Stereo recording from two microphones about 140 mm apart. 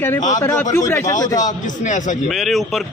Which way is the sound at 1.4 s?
65° left (ahead or behind).